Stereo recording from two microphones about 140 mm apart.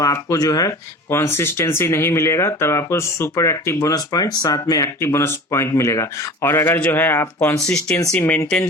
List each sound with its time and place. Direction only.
0.0 s speech: 25° left (ahead or behind)